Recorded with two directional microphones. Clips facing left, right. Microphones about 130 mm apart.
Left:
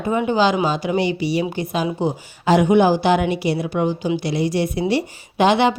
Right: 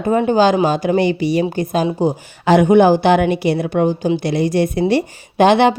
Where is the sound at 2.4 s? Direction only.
55° right (ahead or behind).